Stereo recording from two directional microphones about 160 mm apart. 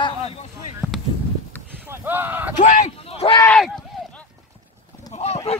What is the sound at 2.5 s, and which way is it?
Speech, 50° left (ahead or behind).